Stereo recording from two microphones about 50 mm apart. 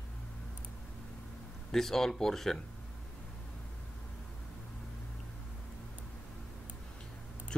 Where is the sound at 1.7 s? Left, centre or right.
Centre.